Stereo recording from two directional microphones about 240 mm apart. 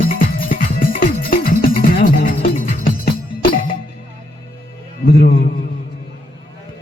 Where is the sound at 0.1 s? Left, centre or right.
Left.